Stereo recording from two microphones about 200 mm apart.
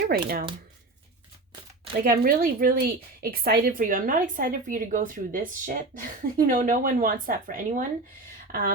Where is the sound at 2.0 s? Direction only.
45° right (ahead or behind).